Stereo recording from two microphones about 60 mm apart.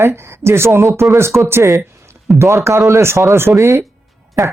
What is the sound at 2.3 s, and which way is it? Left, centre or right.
Speech, right.